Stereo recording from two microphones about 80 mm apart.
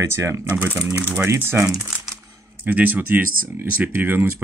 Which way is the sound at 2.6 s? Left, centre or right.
Centre.